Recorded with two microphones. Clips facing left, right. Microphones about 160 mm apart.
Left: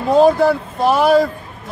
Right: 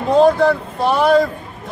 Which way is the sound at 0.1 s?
5° left (ahead or behind).